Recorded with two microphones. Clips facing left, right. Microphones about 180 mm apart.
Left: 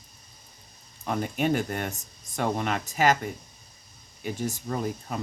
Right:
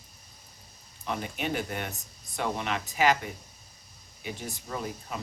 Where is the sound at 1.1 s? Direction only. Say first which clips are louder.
Left 6 dB; 45° left (ahead or behind).